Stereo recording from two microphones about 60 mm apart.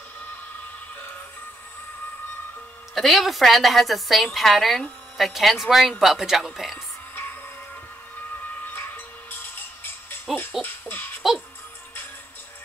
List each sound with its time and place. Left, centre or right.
2.9 s a woman's voice: centre
8.6 s music: left
10.3 s a woman's voice: centre
10.6 s hoot: left